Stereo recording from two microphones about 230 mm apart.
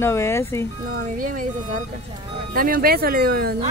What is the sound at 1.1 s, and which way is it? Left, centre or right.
Speech, right.